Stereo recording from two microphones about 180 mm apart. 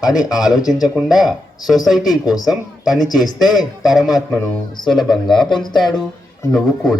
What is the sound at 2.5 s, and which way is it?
Speech, centre (ahead or behind).